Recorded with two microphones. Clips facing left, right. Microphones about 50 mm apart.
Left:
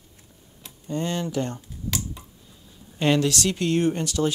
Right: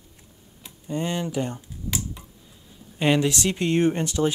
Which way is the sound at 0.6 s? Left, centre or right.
Centre.